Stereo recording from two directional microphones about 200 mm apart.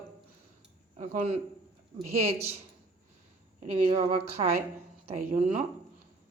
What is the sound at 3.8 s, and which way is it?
Speech, 30° right (ahead or behind).